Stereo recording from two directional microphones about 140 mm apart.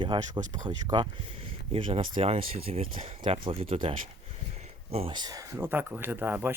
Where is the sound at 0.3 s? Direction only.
65° right (ahead or behind).